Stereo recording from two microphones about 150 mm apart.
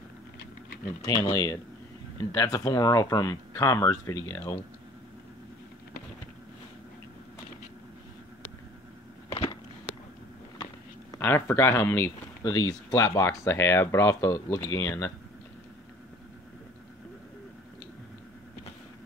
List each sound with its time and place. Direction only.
1.0 s speech: 20° left (ahead or behind)
9.3 s a sound: 35° left (ahead or behind)
10.6 s speech: 20° left (ahead or behind)